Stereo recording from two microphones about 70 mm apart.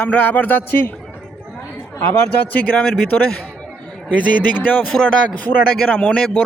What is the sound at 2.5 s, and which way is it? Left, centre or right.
A man's voice, left.